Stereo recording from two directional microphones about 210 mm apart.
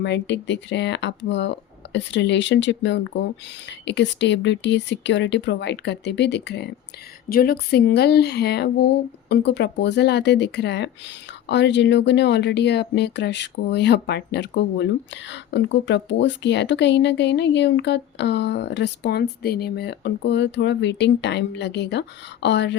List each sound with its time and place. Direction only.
0.0 s speech: 55° left (ahead or behind)